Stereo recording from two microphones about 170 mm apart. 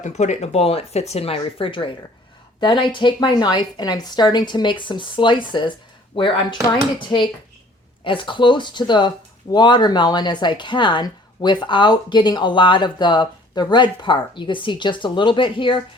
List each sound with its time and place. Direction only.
0.0 s speech: 45° left (ahead or behind)